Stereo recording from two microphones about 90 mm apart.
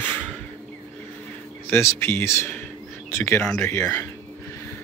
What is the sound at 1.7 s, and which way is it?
Speech, 25° left (ahead or behind).